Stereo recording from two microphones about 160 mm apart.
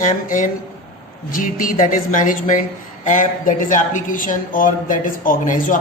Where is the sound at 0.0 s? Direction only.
55° left (ahead or behind).